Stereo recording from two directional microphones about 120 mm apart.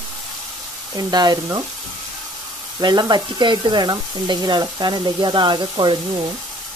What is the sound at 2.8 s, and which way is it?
Frying, 40° right (ahead or behind).